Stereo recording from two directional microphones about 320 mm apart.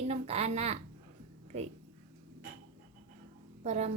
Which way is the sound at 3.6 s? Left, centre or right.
Right.